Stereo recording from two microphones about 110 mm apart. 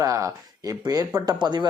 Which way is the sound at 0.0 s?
30° right (ahead or behind).